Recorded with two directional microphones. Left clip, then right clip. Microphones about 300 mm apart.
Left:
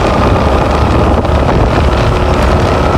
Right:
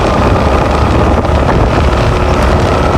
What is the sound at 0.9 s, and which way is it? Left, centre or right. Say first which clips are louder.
Boat: even; centre.